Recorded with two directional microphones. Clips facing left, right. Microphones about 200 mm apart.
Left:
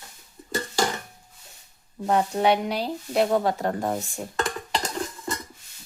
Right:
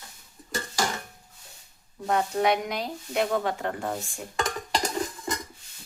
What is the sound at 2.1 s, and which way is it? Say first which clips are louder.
Speech: left 3 dB; 30° left (ahead or behind).